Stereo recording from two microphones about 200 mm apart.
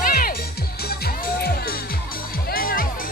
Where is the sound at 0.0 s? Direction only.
45° left (ahead or behind).